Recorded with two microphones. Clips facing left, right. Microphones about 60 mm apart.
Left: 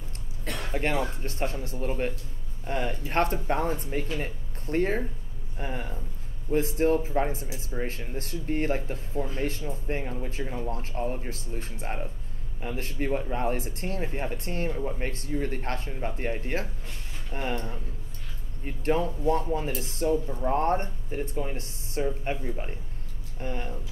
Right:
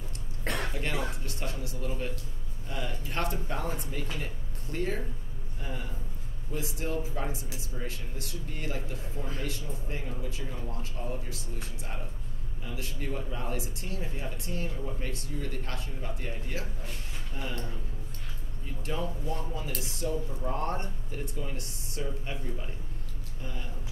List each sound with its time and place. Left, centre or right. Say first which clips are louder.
0.7 s speech: left 6 dB; left